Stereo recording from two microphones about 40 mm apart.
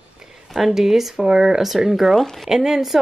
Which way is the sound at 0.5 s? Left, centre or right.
Centre.